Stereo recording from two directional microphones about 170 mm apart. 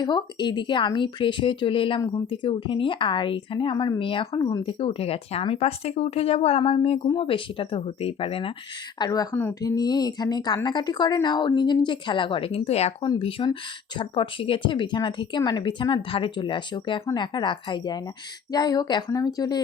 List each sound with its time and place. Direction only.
0.0 s a woman's voice: 25° left (ahead or behind)
9.0 s speech: 20° left (ahead or behind)